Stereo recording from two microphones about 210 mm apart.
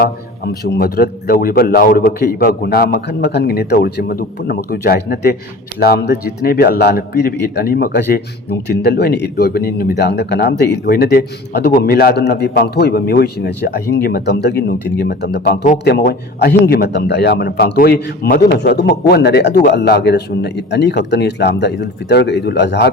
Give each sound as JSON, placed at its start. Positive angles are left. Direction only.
{"t": 0.4, "sound": "a man's voice", "side_deg": 50}